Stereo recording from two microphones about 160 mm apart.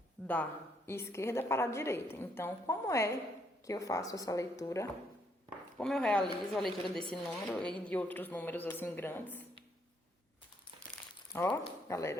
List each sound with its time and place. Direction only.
0.2 s a sound: 10° left (ahead or behind)
0.9 s a woman's voice: 15° left (ahead or behind)
5.7 s a woman's voice: 5° left (ahead or behind)
11.3 s a woman's voice: 15° left (ahead or behind)